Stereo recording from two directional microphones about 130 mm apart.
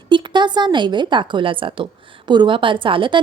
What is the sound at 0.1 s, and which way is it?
Speech, 35° right (ahead or behind).